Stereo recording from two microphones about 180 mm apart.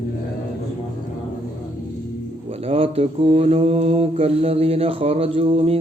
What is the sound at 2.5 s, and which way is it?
Mantra, 35° right (ahead or behind).